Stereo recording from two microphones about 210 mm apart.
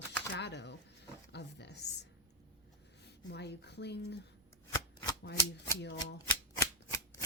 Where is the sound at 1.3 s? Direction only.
55° left (ahead or behind).